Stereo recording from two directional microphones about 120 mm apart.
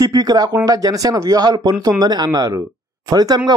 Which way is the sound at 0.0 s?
30° right (ahead or behind).